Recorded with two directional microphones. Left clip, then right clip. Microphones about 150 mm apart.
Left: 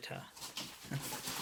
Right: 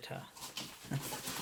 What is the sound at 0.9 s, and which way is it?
Dog, 25° right (ahead or behind).